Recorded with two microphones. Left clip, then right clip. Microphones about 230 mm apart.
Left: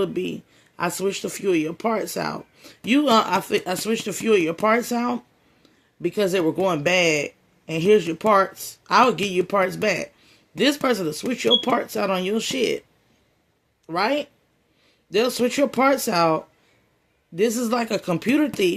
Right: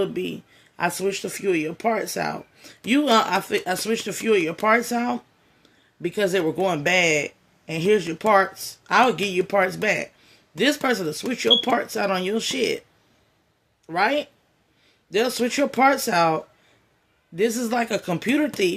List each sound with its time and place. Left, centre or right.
0.0 s speech: centre
13.8 s speech: centre